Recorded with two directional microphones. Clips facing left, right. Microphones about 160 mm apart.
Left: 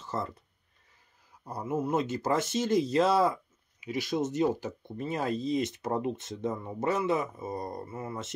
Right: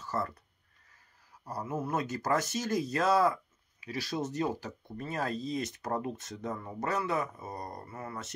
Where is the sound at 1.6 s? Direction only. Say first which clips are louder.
Left 4 dB; 25° left (ahead or behind).